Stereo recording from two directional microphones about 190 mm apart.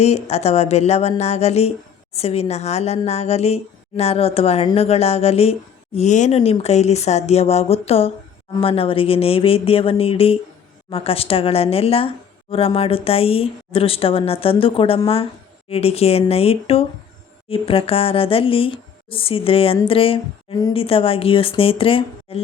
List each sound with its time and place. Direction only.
0.0 s a woman's voice: 35° left (ahead or behind)